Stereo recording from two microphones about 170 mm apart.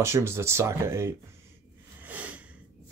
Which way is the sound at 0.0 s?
15° right (ahead or behind).